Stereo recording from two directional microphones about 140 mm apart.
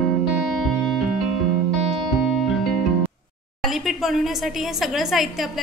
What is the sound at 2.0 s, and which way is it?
Music, centre (ahead or behind).